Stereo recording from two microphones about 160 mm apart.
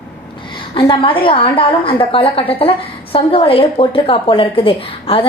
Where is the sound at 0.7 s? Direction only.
30° left (ahead or behind).